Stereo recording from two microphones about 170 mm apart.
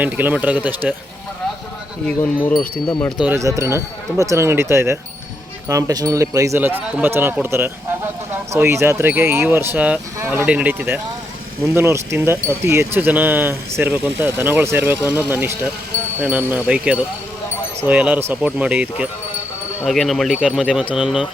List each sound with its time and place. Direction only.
0.0 s speech: 10° right (ahead or behind)
2.0 s speech: 5° left (ahead or behind)
3.2 s speech: 15° right (ahead or behind)